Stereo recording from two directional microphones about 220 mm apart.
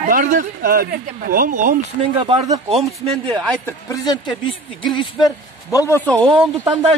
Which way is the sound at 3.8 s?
20° left (ahead or behind).